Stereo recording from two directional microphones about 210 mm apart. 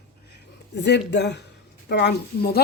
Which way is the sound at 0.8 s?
55° left (ahead or behind).